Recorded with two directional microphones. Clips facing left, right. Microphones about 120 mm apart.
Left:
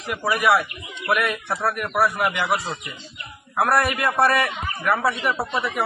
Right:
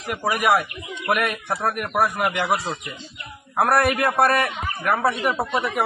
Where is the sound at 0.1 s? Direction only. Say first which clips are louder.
Even; 45° right (ahead or behind).